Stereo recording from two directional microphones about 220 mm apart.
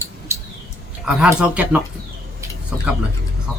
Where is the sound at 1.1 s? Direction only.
5° right (ahead or behind).